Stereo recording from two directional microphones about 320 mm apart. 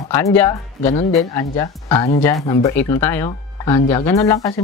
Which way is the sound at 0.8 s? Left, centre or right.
Centre.